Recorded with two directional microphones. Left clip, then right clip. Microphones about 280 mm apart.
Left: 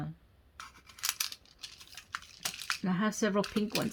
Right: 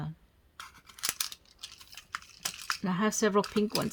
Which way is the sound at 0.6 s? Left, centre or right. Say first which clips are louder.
Right 1 dB; centre.